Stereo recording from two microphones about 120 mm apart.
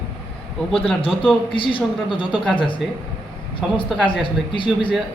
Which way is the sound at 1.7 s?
45° left (ahead or behind).